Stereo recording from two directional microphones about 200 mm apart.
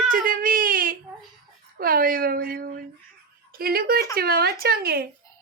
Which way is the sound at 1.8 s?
45° right (ahead or behind).